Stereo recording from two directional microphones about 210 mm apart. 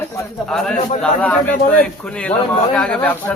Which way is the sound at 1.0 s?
5° left (ahead or behind).